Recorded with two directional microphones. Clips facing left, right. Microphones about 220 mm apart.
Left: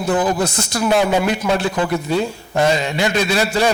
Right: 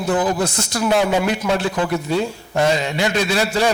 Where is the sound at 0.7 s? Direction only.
20° left (ahead or behind).